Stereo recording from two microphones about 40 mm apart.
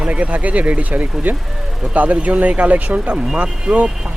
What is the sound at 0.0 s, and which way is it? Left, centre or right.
Speech, right.